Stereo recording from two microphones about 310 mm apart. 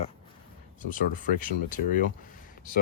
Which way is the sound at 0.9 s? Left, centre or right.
Left.